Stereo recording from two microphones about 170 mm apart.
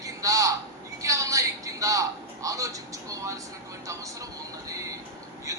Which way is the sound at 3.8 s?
20° right (ahead or behind).